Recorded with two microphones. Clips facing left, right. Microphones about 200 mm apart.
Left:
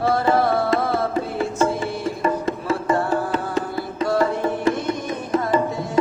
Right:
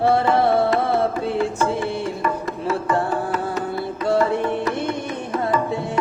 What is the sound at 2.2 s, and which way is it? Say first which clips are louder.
Music: left 2 dB; 25° left (ahead or behind).